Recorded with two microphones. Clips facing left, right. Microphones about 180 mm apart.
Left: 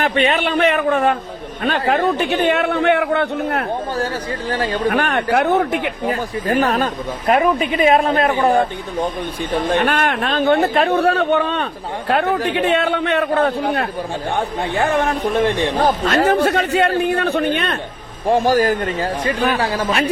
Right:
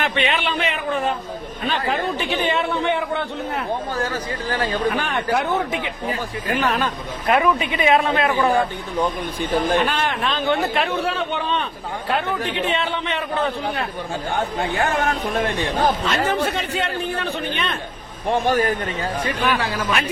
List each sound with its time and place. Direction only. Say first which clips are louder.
0.0 s a man's voice: left 5 dB; 40° left (ahead or behind); by 3.6 s 60° left (ahead or behind)
3.9 s speech: left 3 dB; 35° left (ahead or behind)
4.9 s a man's voice: left 4 dB; 65° left (ahead or behind)
6.5 s speech: left 4 dB; 40° left (ahead or behind)
9.7 s a man's voice: left 3 dB; 60° left (ahead or behind)
12.2 s a man's voice: left 6 dB; 65° left (ahead or behind); by 13.8 s 45° left (ahead or behind)
15.8 s a man's voice: left 4 dB; 50° left (ahead or behind)
16.4 s a man's voice: left 7 dB; 65° left (ahead or behind)
18.3 s speech: left 4 dB; 40° left (ahead or behind)